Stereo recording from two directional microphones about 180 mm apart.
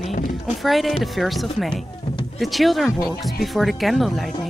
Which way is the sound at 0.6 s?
Centre (ahead or behind).